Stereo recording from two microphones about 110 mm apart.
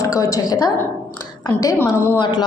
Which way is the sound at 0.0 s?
30° left (ahead or behind).